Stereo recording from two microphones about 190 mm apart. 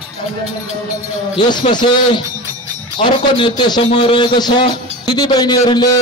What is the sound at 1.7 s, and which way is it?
A man's voice, 25° left (ahead or behind).